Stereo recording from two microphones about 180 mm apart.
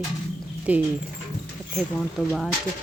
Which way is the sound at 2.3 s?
Centre (ahead or behind).